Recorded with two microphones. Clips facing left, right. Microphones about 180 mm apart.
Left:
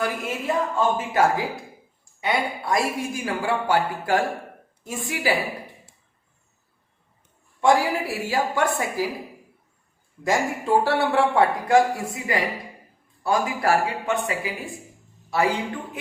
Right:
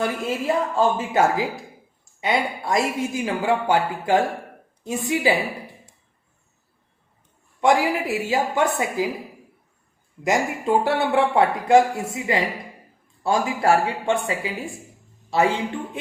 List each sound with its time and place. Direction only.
0.4 s speech: 30° right (ahead or behind)
7.6 s speech: 20° right (ahead or behind)
10.2 s speech: 20° right (ahead or behind)